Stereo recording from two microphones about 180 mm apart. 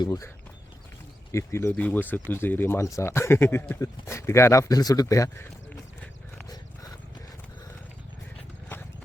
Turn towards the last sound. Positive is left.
turn(degrees=20)  # may be behind; listen again after turning